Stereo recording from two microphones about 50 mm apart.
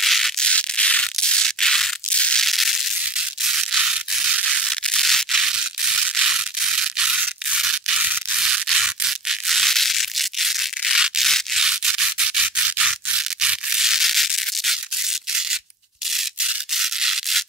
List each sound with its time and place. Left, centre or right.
0.0 s a sound: centre
0.4 s a sound: centre
2.1 s crushing: left
2.4 s crushing: centre
4.6 s a sound: centre
5.4 s scratch: centre
8.3 s rub: centre
9.5 s crushing: centre
11.5 s rub: centre
16.1 s rub: centre